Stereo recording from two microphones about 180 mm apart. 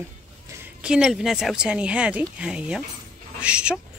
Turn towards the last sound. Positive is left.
turn(degrees=-5)  # may be behind; listen again after turning